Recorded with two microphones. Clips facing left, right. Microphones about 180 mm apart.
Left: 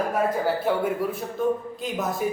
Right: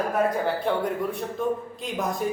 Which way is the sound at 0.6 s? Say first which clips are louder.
Left 1 dB; 5° left (ahead or behind).